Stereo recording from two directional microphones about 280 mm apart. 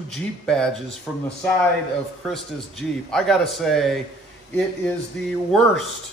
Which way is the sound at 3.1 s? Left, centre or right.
Centre.